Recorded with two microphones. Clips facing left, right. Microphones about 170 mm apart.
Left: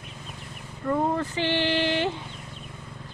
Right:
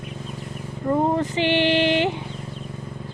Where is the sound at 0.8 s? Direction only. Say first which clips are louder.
Right 4 dB; 20° right (ahead or behind).